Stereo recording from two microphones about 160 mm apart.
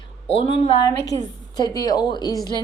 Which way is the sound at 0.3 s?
35° left (ahead or behind).